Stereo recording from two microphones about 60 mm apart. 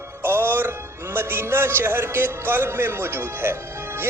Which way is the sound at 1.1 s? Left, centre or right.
Right.